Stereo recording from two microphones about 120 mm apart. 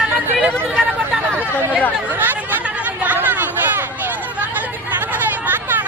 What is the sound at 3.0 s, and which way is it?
Chatter, 15° right (ahead or behind).